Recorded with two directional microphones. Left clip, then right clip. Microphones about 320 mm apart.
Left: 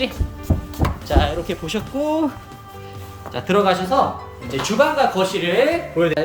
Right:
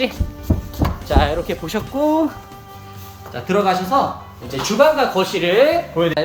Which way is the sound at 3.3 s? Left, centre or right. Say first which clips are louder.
Even; centre.